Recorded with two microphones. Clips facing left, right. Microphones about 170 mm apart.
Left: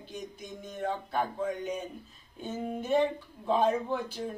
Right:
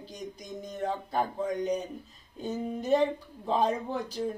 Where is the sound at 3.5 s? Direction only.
35° right (ahead or behind).